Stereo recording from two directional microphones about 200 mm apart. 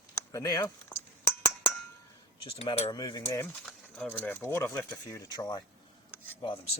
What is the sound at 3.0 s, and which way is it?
Speech, 20° left (ahead or behind).